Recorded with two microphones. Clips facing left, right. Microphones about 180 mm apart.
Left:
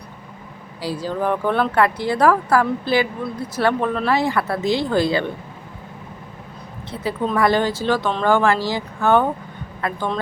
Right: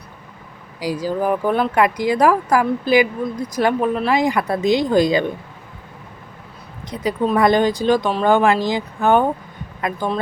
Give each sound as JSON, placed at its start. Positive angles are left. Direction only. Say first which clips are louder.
{"t": 0.8, "sound": "speech", "louder": "right 3 dB", "side_deg": -10}
{"t": 6.9, "sound": "speech", "louder": "right 3 dB", "side_deg": -15}